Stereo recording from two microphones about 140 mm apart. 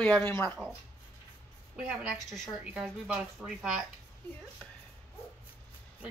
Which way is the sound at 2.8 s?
5° right (ahead or behind).